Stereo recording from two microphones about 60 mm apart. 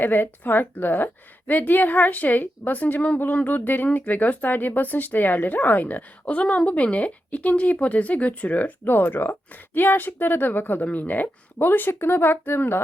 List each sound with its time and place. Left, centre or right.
0.0 s a woman's voice: left